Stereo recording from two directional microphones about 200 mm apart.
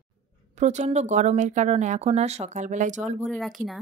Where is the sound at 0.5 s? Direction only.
35° right (ahead or behind).